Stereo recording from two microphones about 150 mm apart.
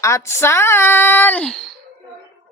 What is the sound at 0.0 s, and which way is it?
Speech, 20° left (ahead or behind).